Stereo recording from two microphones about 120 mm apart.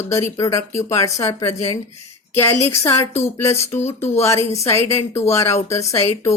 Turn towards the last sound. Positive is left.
turn(degrees=25)  # may be behind; listen again after turning